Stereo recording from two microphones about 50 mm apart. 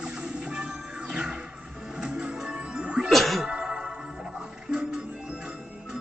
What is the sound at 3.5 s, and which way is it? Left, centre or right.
Music, centre.